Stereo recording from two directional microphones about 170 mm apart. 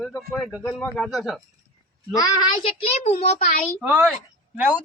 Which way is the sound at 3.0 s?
35° left (ahead or behind).